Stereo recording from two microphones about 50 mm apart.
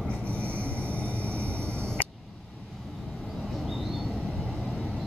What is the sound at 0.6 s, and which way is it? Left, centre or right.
Vehicle, left.